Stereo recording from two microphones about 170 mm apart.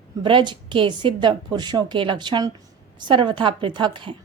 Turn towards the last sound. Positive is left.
turn(degrees=-30)  # may be behind; listen again after turning